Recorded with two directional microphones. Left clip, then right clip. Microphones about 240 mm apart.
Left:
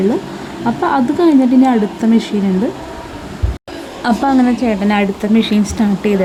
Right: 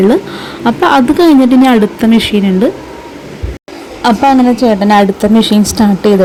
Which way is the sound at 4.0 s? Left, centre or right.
Centre.